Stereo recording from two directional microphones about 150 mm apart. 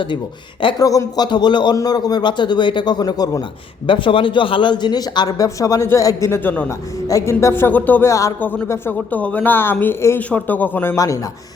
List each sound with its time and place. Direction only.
0.6 s a man's voice: 25° left (ahead or behind)